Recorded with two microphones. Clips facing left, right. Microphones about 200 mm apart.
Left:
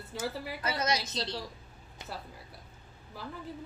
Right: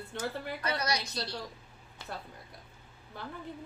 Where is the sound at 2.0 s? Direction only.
20° left (ahead or behind).